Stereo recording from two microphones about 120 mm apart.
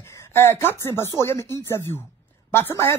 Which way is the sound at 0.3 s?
20° left (ahead or behind).